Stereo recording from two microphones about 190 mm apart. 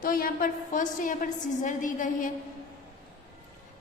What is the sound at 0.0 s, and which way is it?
A woman's voice, 50° left (ahead or behind).